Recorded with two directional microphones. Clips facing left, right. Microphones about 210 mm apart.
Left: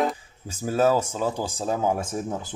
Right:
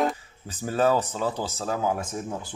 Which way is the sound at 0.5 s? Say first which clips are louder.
Left 2 dB; 10° left (ahead or behind).